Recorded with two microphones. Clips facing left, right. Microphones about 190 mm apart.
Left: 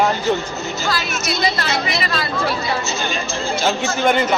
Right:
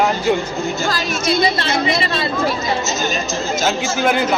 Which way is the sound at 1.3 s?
25° right (ahead or behind).